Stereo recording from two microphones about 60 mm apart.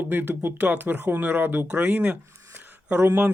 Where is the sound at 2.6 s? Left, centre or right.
Right.